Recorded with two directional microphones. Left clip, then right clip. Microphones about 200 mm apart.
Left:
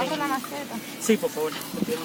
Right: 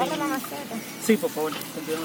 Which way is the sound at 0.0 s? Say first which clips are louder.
Right 1 dB; 55° left (ahead or behind).